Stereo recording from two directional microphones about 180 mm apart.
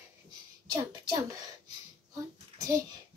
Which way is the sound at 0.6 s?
20° right (ahead or behind).